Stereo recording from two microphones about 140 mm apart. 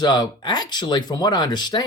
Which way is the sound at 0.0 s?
30° left (ahead or behind).